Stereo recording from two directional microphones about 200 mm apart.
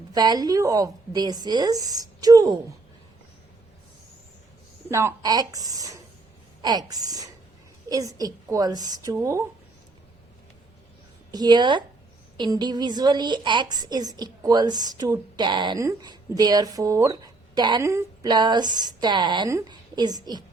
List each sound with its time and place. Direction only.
0.1 s a woman's voice: 20° right (ahead or behind)
4.9 s a woman's voice: 15° right (ahead or behind)
11.3 s a woman's voice: 20° right (ahead or behind)